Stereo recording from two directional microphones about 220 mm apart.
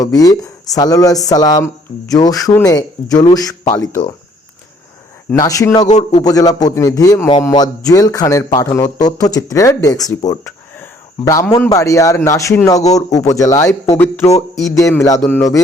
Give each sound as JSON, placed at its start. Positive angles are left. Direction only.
{"t": 0.0, "sound": "speech", "side_deg": 15}
{"t": 5.3, "sound": "speech", "side_deg": 15}
{"t": 5.8, "sound": "speech", "side_deg": 30}
{"t": 6.2, "sound": "speech", "side_deg": 15}
{"t": 12.8, "sound": "speech", "side_deg": 30}
{"t": 13.2, "sound": "speech", "side_deg": 15}